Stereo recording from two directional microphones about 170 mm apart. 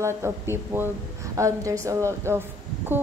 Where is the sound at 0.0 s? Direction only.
15° right (ahead or behind).